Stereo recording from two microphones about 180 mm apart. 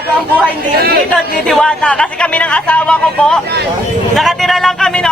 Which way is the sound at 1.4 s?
5° left (ahead or behind).